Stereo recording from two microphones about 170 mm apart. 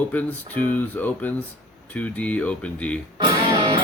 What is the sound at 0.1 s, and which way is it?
Speech, 10° left (ahead or behind).